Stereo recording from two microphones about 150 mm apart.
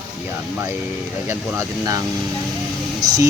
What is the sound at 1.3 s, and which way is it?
A man's voice, 20° right (ahead or behind).